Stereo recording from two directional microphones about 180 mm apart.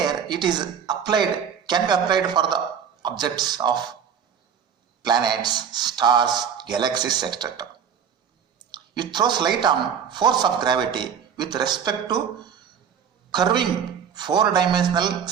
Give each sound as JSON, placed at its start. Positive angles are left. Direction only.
{"t": 0.0, "sound": "speech", "side_deg": -25}
{"t": 5.0, "sound": "speech", "side_deg": -25}
{"t": 8.7, "sound": "speech", "side_deg": -25}